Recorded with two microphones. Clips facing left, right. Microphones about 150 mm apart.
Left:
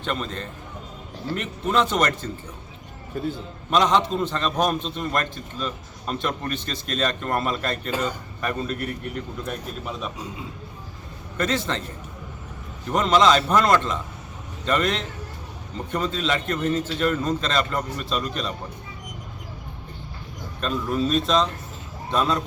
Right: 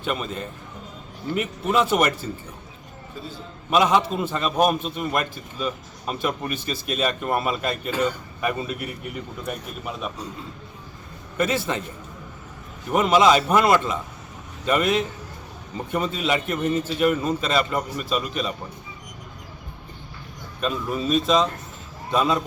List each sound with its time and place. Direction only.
0.0 s a man's voice: 10° right (ahead or behind)
3.1 s a man's voice: 55° left (ahead or behind)
3.7 s a man's voice: 10° right (ahead or behind)
11.3 s a man's voice: 10° right (ahead or behind)
12.9 s a man's voice: 10° right (ahead or behind)
20.6 s a man's voice: 5° right (ahead or behind)